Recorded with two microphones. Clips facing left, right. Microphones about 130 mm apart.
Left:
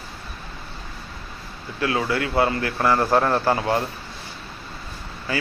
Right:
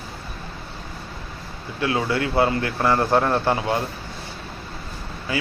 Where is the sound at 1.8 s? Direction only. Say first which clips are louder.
Right 1 dB; 25° right (ahead or behind).